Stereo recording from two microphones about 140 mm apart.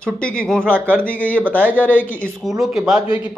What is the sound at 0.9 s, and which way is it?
Speech, 10° left (ahead or behind).